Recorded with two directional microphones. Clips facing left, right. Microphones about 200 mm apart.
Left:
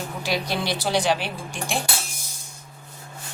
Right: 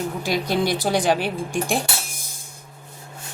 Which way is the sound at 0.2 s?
50° right (ahead or behind).